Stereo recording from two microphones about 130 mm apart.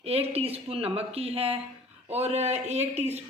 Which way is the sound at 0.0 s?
50° right (ahead or behind).